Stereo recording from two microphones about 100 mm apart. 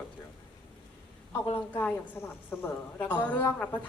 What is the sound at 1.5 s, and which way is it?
A woman's voice, 20° left (ahead or behind).